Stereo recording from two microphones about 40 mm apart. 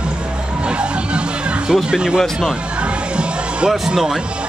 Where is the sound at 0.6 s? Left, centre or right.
Right.